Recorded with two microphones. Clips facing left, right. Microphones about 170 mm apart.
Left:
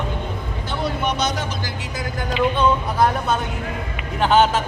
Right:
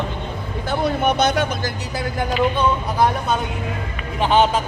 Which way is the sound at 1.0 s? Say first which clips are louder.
Right 5 dB; 55° right (ahead or behind).